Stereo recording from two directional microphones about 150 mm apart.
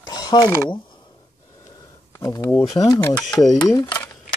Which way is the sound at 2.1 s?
20° left (ahead or behind).